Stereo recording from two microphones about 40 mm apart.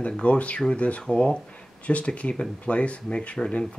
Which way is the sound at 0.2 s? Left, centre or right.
Left.